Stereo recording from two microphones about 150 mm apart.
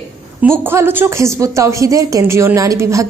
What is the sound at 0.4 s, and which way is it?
A woman's voice, 15° right (ahead or behind).